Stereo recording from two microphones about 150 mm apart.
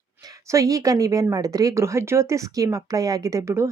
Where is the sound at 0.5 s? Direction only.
20° right (ahead or behind).